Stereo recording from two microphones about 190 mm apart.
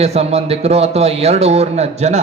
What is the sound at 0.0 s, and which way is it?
A man's voice, 35° right (ahead or behind).